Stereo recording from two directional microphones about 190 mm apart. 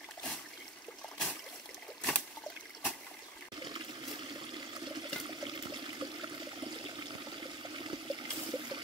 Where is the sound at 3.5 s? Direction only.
25° right (ahead or behind).